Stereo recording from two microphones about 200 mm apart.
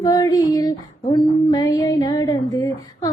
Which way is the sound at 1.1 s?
20° left (ahead or behind).